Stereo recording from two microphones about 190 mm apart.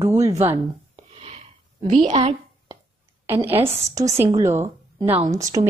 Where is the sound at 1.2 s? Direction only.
35° right (ahead or behind).